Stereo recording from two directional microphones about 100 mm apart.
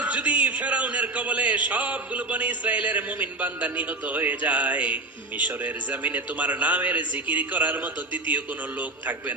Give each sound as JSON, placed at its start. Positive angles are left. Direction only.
{"t": 0.0, "sound": "a man's voice", "side_deg": -15}